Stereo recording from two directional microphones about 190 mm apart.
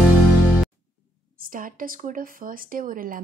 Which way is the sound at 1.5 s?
45° right (ahead or behind).